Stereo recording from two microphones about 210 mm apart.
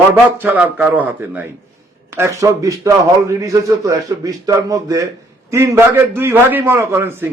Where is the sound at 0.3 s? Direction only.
10° right (ahead or behind).